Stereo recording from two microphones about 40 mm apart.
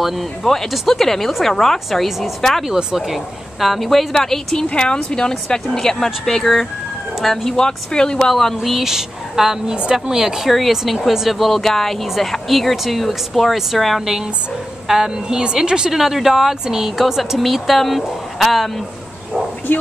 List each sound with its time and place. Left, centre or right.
0.0 s speech: centre
1.9 s speech: centre
4.6 s speech: left; by 7.5 s centre
7.5 s speech: centre
8.2 s speech: centre
8.6 s a woman's voice: centre
10.5 s a woman's voice: centre
15.9 s a woman's voice: centre
19.7 s speech: left